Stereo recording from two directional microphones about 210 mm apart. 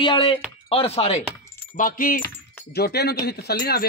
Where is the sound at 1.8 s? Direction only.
40° left (ahead or behind).